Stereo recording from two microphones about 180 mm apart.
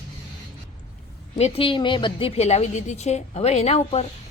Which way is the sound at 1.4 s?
35° left (ahead or behind).